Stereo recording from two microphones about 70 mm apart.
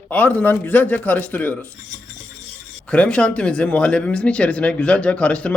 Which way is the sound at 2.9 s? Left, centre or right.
Centre.